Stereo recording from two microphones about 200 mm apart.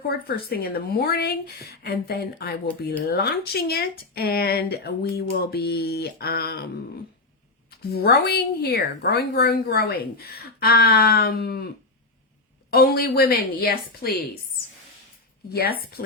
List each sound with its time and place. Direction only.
0.1 s a woman's voice: 50° left (ahead or behind)
7.8 s a woman's voice: 50° left (ahead or behind)
12.7 s a woman's voice: 50° left (ahead or behind)
15.4 s a woman's voice: 50° left (ahead or behind)